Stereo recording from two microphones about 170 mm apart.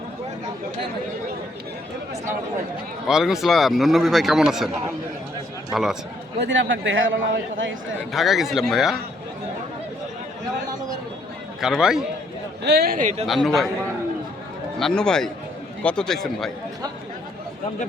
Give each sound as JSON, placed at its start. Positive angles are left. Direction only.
{"t": 3.1, "sound": "a man's voice", "side_deg": -5}
{"t": 5.7, "sound": "a man's voice", "side_deg": 0}
{"t": 6.4, "sound": "a man's voice", "side_deg": -90}
{"t": 8.1, "sound": "a man's voice", "side_deg": 0}
{"t": 11.6, "sound": "a man's voice", "side_deg": -5}
{"t": 12.6, "sound": "a man's voice", "side_deg": -70}
{"t": 13.2, "sound": "a man's voice", "side_deg": 0}
{"t": 14.8, "sound": "a man's voice", "side_deg": 5}